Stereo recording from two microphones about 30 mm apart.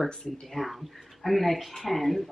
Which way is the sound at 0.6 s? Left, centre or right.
Centre.